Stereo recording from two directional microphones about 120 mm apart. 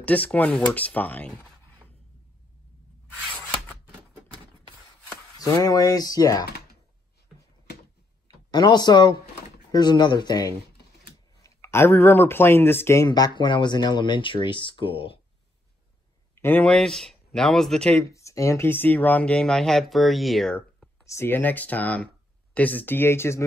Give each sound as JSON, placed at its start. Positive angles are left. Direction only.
{"t": 0.0, "sound": "speech", "side_deg": 10}
{"t": 5.4, "sound": "speech", "side_deg": 30}
{"t": 8.5, "sound": "speech", "side_deg": 35}
{"t": 11.4, "sound": "speech", "side_deg": 20}
{"t": 16.3, "sound": "speech", "side_deg": 15}
{"t": 16.7, "sound": "speech", "side_deg": 5}
{"t": 18.0, "sound": "speech", "side_deg": 25}
{"t": 21.0, "sound": "speech", "side_deg": 25}